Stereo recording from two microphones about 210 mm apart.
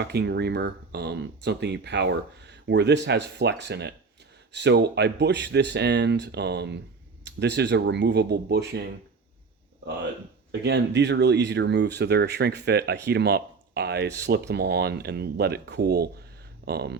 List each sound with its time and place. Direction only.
0.0 s speech: 55° right (ahead or behind)
10.5 s speech: 55° right (ahead or behind)